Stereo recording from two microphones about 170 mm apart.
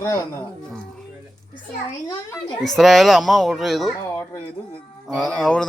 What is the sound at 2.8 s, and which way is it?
Speech, centre (ahead or behind).